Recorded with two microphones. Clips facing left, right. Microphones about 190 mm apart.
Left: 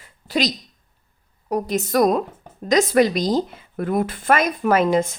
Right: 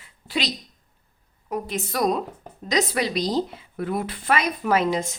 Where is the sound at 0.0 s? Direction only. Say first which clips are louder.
Left 6 dB; 40° left (ahead or behind).